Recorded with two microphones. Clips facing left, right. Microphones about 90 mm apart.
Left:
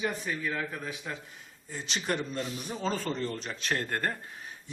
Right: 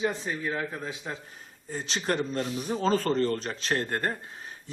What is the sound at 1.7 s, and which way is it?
A man's voice, 35° right (ahead or behind).